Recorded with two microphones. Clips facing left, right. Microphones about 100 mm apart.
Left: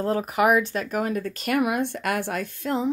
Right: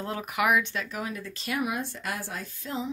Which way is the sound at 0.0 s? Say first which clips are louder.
Left 7 dB; 35° left (ahead or behind).